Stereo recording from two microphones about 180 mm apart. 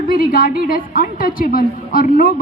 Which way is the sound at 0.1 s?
55° left (ahead or behind).